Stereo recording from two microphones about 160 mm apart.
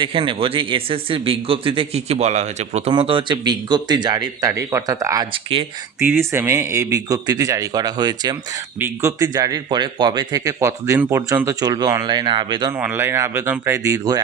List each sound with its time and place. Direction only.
0.0 s a man's voice: 30° right (ahead or behind)
2.9 s speech: 30° right (ahead or behind)
5.3 s a man's voice: 35° right (ahead or behind)
6.0 s speech: 15° right (ahead or behind)
12.7 s speech: 15° right (ahead or behind)